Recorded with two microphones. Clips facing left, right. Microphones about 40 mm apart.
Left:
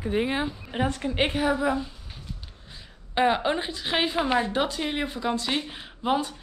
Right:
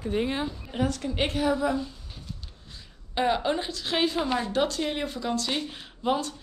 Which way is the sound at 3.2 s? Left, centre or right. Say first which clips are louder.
Left 2 dB; centre.